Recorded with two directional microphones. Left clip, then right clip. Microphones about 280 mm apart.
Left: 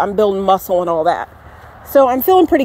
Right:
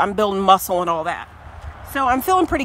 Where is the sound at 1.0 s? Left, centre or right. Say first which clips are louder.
Left 9 dB; centre.